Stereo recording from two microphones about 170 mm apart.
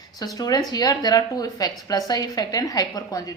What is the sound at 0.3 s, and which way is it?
A woman's voice, 20° left (ahead or behind).